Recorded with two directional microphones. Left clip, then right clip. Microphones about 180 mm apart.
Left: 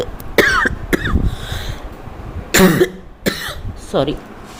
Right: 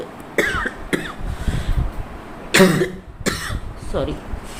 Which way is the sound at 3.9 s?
50° left (ahead or behind).